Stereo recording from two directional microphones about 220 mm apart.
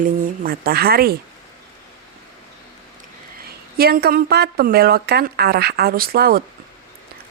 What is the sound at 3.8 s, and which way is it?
Speech, 45° right (ahead or behind).